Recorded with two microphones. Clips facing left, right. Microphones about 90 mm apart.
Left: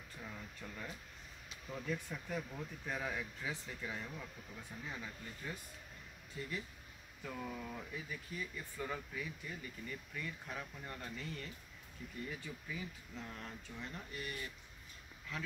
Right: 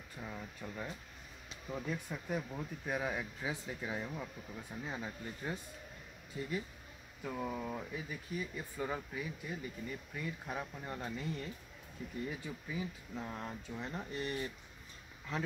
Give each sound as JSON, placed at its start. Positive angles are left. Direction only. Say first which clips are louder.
{"t": 0.2, "sound": "speech", "louder": "right 5 dB", "side_deg": -20}
{"t": 7.2, "sound": "speech", "louder": "right 5 dB", "side_deg": -20}